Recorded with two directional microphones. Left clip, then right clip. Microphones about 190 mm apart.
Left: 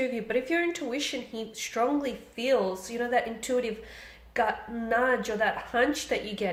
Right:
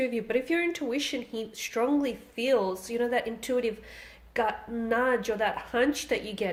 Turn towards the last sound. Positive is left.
turn(degrees=-45)  # may be behind; listen again after turning